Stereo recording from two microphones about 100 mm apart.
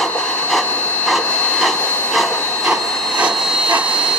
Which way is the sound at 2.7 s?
10° right (ahead or behind).